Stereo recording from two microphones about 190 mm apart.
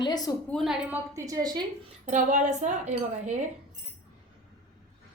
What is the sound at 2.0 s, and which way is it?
Speech, 40° right (ahead or behind).